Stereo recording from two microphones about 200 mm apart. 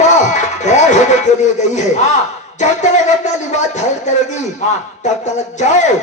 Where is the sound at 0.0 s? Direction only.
35° left (ahead or behind).